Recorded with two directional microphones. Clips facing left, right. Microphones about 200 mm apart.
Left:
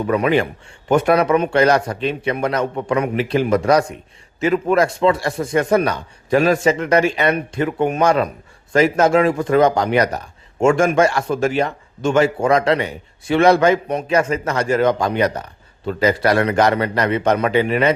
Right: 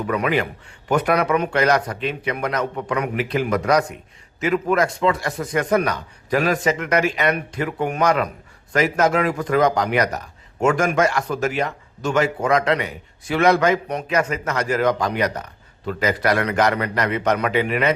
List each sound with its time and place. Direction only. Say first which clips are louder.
0.1 s a man's voice: left 5 dB; 25° left (ahead or behind)